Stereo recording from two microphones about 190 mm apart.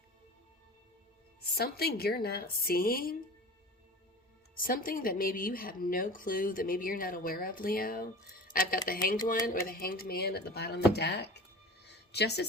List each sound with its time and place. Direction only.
1.5 s speech: 55° left (ahead or behind)
4.5 s speech: 50° left (ahead or behind)
11.9 s a sound: 60° left (ahead or behind)